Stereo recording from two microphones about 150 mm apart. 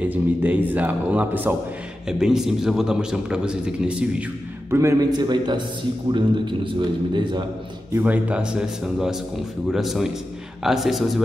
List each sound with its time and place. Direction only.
0.1 s a man's voice: 10° right (ahead or behind)
4.7 s a man's voice: 20° right (ahead or behind)
7.9 s a man's voice: 10° right (ahead or behind)